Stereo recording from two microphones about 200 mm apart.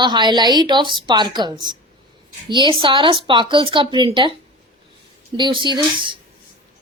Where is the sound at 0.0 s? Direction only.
20° right (ahead or behind).